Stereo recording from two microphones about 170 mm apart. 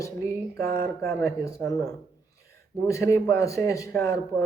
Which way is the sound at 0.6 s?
60° right (ahead or behind).